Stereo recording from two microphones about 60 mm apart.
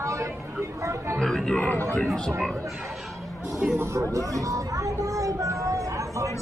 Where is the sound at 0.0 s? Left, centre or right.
Right.